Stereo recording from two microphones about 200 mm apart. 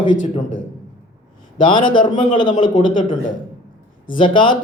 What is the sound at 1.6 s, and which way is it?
Speech, 25° left (ahead or behind).